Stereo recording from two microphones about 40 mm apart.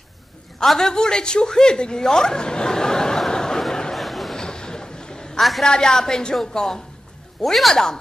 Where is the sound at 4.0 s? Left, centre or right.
Centre.